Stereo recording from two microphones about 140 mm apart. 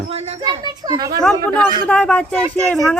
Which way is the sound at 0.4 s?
30° right (ahead or behind).